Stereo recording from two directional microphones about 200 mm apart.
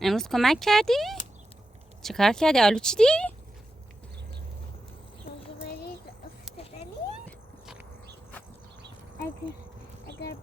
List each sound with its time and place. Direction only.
0.0 s speech: centre (ahead or behind)
6.6 s vehicle: 30° left (ahead or behind)